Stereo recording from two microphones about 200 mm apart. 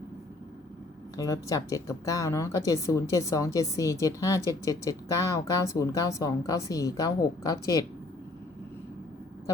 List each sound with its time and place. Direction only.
1.1 s speech: 15° left (ahead or behind)